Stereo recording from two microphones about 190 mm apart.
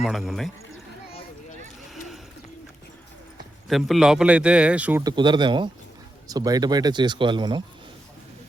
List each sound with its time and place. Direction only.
0.0 s a man's voice: centre (ahead or behind)
3.7 s a man's voice: centre (ahead or behind)
5.0 s speech: 25° right (ahead or behind)